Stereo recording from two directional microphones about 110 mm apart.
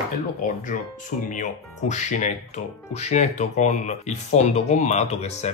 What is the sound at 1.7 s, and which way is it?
Speech, 90° left.